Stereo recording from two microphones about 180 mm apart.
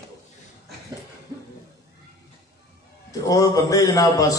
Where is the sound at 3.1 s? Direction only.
20° left (ahead or behind).